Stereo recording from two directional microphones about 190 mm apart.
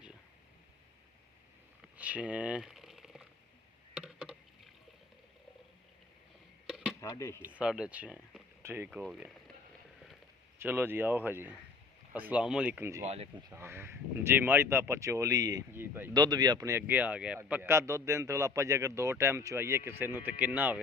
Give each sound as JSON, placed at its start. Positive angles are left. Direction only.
{"t": 2.0, "sound": "a sound", "side_deg": -5}
{"t": 6.7, "sound": "a sound", "side_deg": -5}
{"t": 7.0, "sound": "speech", "side_deg": 15}
{"t": 7.4, "sound": "speech", "side_deg": -5}
{"t": 10.6, "sound": "speech", "side_deg": -10}
{"t": 13.1, "sound": "speech", "side_deg": -30}
{"t": 13.5, "sound": "speech", "side_deg": -10}
{"t": 16.1, "sound": "speech", "side_deg": -20}